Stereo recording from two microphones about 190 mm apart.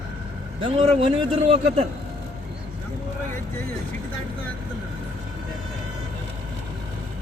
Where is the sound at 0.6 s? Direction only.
30° right (ahead or behind).